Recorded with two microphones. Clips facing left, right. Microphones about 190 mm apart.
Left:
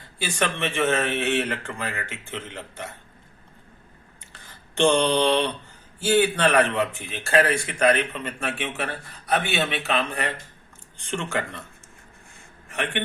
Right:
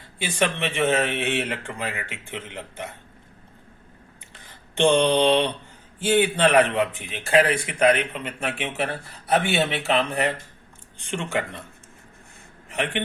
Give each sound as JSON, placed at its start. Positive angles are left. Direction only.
{"t": 0.3, "sound": "speech", "side_deg": -20}
{"t": 4.8, "sound": "speech", "side_deg": -20}
{"t": 12.6, "sound": "a sound", "side_deg": -25}